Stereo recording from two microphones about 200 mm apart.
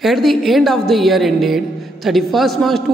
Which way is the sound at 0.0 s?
Centre (ahead or behind).